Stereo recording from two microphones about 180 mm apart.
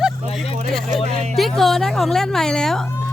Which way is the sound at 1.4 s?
Centre (ahead or behind).